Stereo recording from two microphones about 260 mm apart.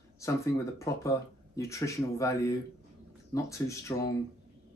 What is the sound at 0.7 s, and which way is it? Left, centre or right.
Speech, centre.